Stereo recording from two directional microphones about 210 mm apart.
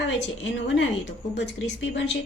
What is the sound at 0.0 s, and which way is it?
Speech, 60° left (ahead or behind).